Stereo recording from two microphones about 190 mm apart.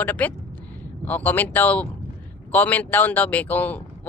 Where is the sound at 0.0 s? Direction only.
10° left (ahead or behind).